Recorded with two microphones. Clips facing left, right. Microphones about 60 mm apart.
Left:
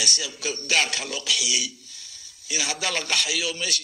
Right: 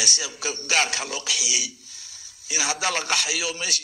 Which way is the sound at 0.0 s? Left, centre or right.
Centre.